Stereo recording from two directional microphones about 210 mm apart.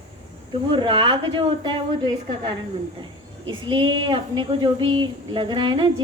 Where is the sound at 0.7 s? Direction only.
20° right (ahead or behind).